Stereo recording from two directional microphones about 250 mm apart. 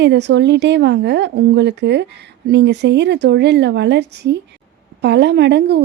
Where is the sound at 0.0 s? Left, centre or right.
Right.